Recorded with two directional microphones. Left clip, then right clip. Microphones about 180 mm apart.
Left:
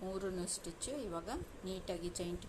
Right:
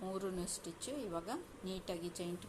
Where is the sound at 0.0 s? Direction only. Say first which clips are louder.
Left 1 dB; 5° right (ahead or behind).